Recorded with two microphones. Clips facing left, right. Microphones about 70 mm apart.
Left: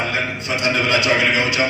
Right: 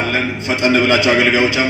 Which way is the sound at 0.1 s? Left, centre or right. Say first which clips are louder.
Right 4 dB; right.